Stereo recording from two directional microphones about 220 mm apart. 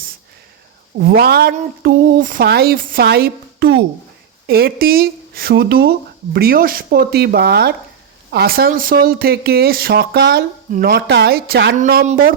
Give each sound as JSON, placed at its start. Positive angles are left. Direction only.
{"t": 0.9, "sound": "speech", "side_deg": -45}